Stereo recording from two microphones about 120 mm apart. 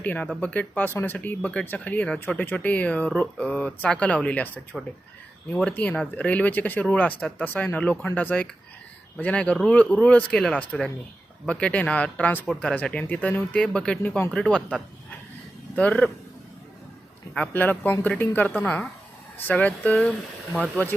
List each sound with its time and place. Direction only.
0.0 s speech: 15° left (ahead or behind)
5.6 s speech: 15° left (ahead or behind)
17.3 s speech: 15° left (ahead or behind)